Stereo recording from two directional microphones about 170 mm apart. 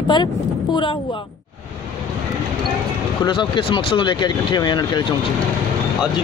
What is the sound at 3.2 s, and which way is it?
Speech, 30° left (ahead or behind).